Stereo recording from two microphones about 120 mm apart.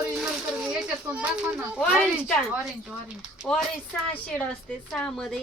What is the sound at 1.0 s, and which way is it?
Speech, 10° right (ahead or behind).